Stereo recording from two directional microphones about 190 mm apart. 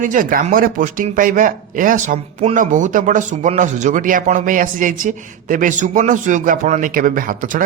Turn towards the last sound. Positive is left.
turn(degrees=-45)  # may be behind; listen again after turning